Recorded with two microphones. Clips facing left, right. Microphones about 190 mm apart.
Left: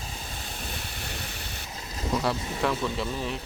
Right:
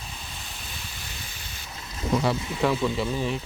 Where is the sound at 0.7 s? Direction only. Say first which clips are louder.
Left 4 dB; 60° left (ahead or behind).